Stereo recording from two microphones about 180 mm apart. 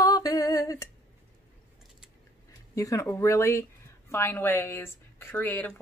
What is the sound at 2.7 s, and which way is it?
A woman's voice, 15° left (ahead or behind).